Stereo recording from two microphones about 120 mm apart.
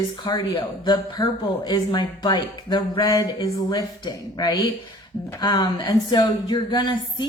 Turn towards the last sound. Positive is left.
turn(degrees=40)  # may be behind; listen again after turning